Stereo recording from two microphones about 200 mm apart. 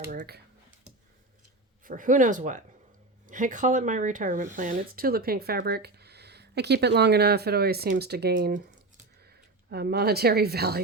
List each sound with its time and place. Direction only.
0.1 s computer keyboard: 50° right (ahead or behind)
1.8 s a woman's voice: 40° right (ahead or behind)